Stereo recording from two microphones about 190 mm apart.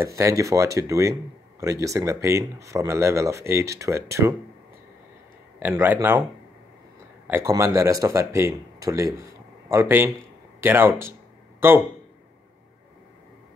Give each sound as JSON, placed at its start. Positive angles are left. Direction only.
{"t": 0.0, "sound": "speech", "side_deg": -15}
{"t": 5.6, "sound": "speech", "side_deg": -10}
{"t": 7.2, "sound": "speech", "side_deg": -15}